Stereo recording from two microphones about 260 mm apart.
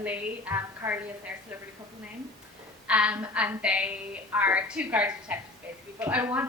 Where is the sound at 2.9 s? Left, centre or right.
Centre.